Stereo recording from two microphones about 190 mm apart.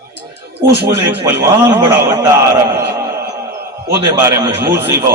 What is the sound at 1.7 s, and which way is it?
Speech, 20° right (ahead or behind).